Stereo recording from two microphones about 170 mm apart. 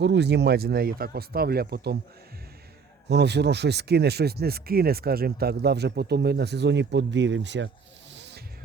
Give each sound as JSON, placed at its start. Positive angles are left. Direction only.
{"t": 0.0, "sound": "speech", "side_deg": -90}
{"t": 3.1, "sound": "speech", "side_deg": -80}
{"t": 8.1, "sound": "music", "side_deg": -90}